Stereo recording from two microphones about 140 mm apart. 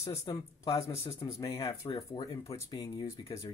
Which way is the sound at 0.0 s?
45° left (ahead or behind).